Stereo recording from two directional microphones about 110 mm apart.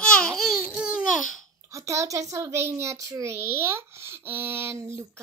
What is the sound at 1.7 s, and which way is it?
A child's voice, 30° right (ahead or behind).